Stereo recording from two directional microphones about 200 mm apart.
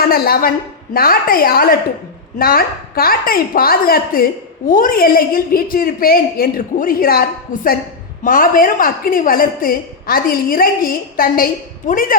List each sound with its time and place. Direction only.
0.0 s a woman's voice: 50° left (ahead or behind)